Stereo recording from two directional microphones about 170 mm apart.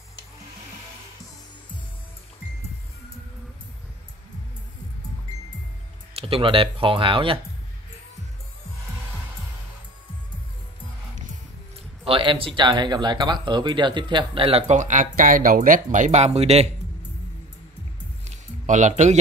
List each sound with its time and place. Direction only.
6.1 s speech: 35° right (ahead or behind)
12.0 s a sound: 30° right (ahead or behind)
12.5 s speech: 25° right (ahead or behind)
18.2 s music: 45° right (ahead or behind)